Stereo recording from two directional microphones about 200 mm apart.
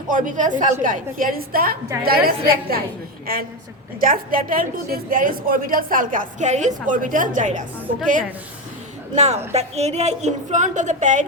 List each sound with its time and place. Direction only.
0.1 s a woman's voice: 40° right (ahead or behind)